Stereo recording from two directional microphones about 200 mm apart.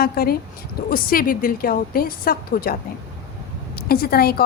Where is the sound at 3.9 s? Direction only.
50° left (ahead or behind).